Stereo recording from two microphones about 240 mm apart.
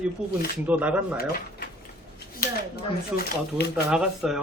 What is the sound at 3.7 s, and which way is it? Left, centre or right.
Speech, centre.